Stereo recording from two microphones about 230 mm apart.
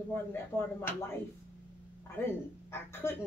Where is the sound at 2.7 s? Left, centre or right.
Centre.